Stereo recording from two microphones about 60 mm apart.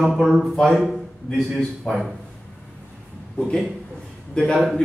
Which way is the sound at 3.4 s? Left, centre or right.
Centre.